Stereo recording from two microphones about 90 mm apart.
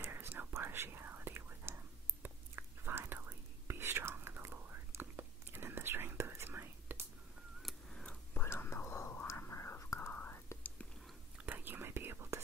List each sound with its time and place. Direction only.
0.0 s whispering: 25° right (ahead or behind)
7.6 s scissors: 10° left (ahead or behind)
8.4 s whispering: 25° left (ahead or behind)
9.9 s whispering: 20° left (ahead or behind)
11.3 s whispering: 20° right (ahead or behind)